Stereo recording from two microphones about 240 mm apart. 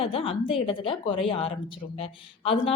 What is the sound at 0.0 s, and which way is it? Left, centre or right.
A woman's voice, left.